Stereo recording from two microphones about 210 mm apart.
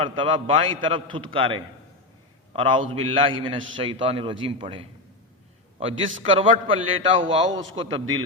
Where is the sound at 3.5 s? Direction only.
65° right (ahead or behind).